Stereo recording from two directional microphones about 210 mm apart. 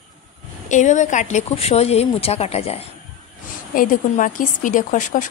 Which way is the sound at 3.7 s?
40° left (ahead or behind).